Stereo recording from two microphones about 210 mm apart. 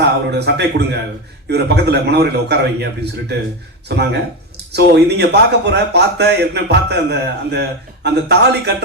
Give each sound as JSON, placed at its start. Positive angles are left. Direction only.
{"t": 0.0, "sound": "speech", "side_deg": -55}